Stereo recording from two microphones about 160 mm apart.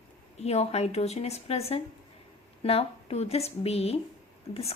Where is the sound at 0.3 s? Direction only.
40° left (ahead or behind).